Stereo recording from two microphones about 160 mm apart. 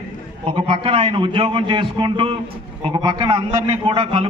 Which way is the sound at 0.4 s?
35° right (ahead or behind).